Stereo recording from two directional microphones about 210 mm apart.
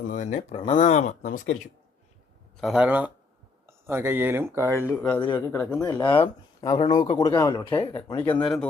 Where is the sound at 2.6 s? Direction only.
5° right (ahead or behind).